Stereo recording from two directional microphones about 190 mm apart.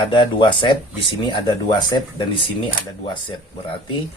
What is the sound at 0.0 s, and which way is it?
Speech, 25° left (ahead or behind).